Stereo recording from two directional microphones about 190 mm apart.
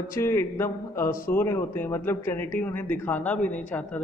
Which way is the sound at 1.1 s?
50° left (ahead or behind).